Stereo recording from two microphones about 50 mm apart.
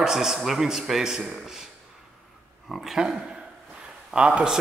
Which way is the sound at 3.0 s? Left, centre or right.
Right.